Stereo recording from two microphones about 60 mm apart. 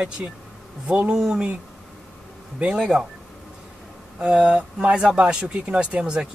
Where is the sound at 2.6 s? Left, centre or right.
Centre.